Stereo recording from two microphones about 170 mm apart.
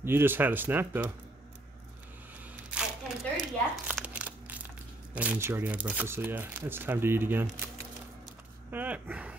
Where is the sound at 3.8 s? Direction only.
5° right (ahead or behind).